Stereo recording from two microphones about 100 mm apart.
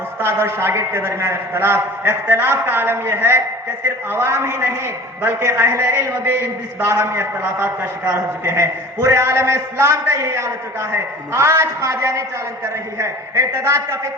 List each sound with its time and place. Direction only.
0.2 s a man's voice: 25° right (ahead or behind)